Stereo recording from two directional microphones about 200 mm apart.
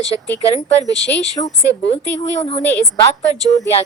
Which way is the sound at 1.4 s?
25° left (ahead or behind).